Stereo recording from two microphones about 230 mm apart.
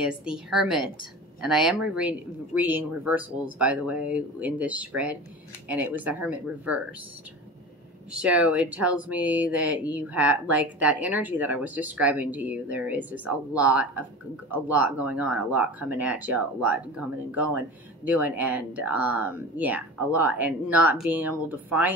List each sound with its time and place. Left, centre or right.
0.0 s speech: centre
8.1 s speech: centre